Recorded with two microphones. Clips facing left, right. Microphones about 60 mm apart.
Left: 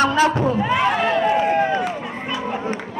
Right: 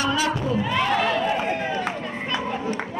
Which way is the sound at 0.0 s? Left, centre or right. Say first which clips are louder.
Left 7 dB; left.